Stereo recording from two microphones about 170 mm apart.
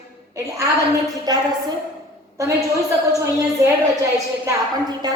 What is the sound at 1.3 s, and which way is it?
Speech, 25° right (ahead or behind).